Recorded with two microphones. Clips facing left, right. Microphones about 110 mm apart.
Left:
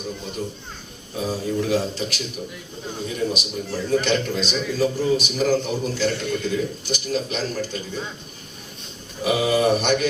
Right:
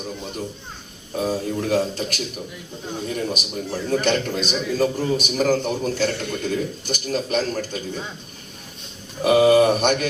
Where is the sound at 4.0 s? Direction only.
50° right (ahead or behind).